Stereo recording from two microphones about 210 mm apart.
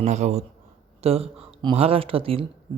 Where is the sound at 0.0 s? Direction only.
35° right (ahead or behind).